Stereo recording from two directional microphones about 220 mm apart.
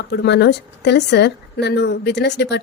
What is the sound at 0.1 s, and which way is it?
A woman's voice, 50° left (ahead or behind).